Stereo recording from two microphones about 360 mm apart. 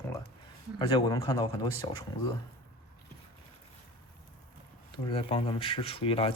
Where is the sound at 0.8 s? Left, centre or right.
Centre.